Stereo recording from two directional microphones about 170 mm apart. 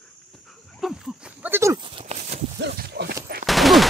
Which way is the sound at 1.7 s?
30° right (ahead or behind).